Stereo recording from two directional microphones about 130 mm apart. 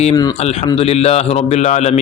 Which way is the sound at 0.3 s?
55° left (ahead or behind).